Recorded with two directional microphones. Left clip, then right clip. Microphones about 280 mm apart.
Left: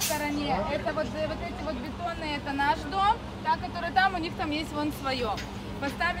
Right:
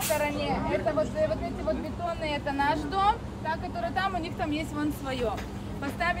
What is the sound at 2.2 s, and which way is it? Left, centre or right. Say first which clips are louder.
Speech: even; centre.